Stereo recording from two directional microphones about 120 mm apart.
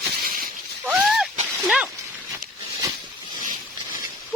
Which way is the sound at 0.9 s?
5° right (ahead or behind).